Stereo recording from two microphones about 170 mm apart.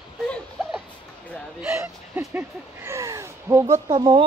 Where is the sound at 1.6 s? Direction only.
10° right (ahead or behind).